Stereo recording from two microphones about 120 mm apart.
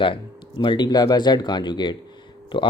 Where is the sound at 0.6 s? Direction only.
40° left (ahead or behind).